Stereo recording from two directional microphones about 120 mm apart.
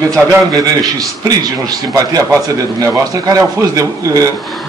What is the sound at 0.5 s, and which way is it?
A man's voice, 30° right (ahead or behind).